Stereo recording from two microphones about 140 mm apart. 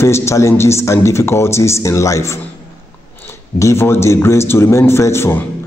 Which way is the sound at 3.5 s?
20° left (ahead or behind).